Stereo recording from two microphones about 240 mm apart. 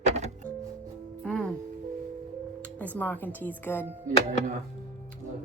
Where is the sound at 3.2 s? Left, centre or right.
Centre.